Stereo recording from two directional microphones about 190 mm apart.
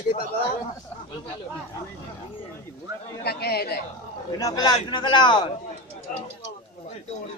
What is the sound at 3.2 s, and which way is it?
Speech, 55° left (ahead or behind).